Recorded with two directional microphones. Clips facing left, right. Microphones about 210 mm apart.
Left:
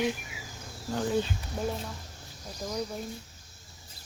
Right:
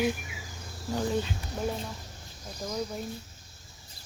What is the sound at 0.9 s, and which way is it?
Cricket, 5° right (ahead or behind).